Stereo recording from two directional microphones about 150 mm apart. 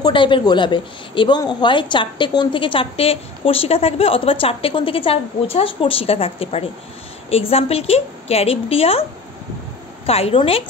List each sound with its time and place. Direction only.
0.0 s a woman's voice: 35° left (ahead or behind)
10.0 s a woman's voice: 40° left (ahead or behind)